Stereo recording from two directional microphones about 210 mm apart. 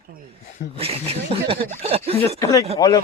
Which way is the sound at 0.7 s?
25° right (ahead or behind).